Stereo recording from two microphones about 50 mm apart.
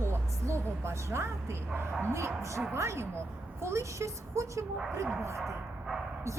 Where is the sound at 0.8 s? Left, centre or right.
Right.